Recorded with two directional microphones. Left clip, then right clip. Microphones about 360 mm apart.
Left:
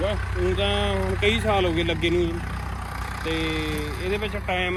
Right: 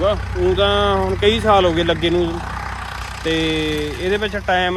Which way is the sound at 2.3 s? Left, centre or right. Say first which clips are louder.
Right 7 dB; right.